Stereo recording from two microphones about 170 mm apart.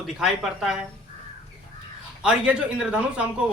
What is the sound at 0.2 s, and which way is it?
Speech, 5° right (ahead or behind).